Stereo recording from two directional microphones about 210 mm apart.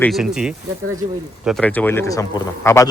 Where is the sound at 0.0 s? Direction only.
Centre (ahead or behind).